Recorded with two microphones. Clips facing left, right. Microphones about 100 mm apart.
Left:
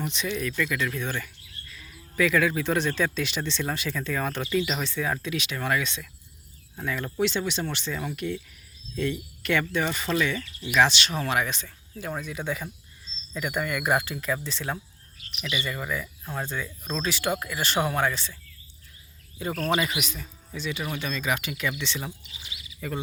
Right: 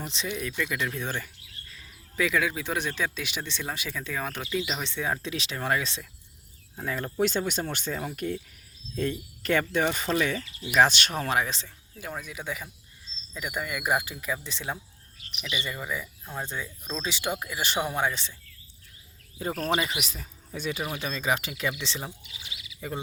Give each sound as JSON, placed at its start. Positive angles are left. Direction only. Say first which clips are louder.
{"t": 0.0, "sound": "speech", "louder": "left 4 dB", "side_deg": -30}
{"t": 0.3, "sound": "speech", "louder": "left 2 dB", "side_deg": -15}
{"t": 12.2, "sound": "speech", "louder": "left 4 dB", "side_deg": -5}
{"t": 19.7, "sound": "speech", "louder": "left 2 dB", "side_deg": -30}
{"t": 22.3, "sound": "bird", "louder": "even", "side_deg": 35}